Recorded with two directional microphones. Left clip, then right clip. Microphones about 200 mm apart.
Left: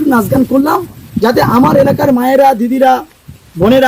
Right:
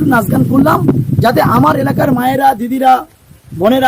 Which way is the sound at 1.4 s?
30° right (ahead or behind).